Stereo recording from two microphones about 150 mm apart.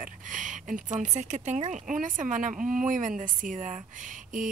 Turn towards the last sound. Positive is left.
turn(degrees=-60)  # may be behind; listen again after turning